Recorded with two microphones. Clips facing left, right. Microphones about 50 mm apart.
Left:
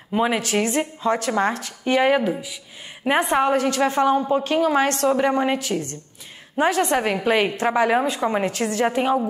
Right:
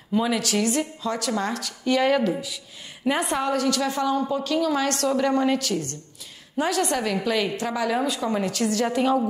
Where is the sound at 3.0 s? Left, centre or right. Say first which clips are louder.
Left 5 dB; left.